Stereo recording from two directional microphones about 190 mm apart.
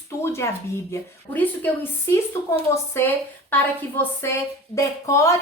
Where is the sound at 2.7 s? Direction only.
10° left (ahead or behind).